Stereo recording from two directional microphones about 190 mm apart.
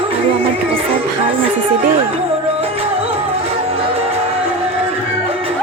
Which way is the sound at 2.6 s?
30° right (ahead or behind).